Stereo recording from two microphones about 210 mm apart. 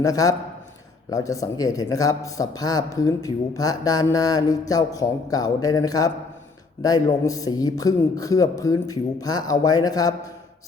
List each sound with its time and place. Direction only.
0.0 s speech: 15° left (ahead or behind)